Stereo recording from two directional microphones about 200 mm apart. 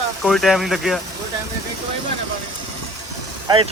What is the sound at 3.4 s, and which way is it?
Speech, 25° right (ahead or behind).